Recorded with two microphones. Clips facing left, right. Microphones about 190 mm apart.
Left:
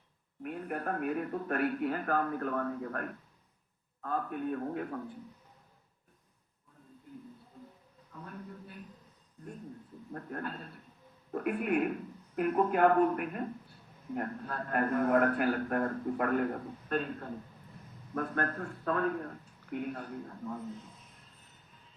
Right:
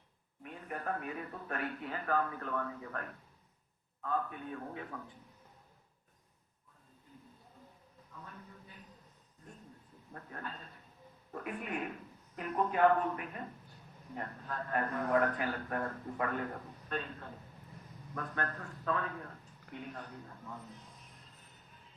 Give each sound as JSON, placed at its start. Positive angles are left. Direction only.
{"t": 0.4, "sound": "a man's voice", "side_deg": 50}
{"t": 10.1, "sound": "a man's voice", "side_deg": 50}
{"t": 13.1, "sound": "a man's voice", "side_deg": 55}